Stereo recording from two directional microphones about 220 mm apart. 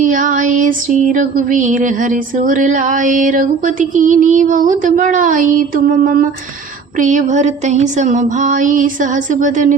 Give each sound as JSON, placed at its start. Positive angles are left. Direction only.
{"t": 0.0, "sound": "female singing", "side_deg": -35}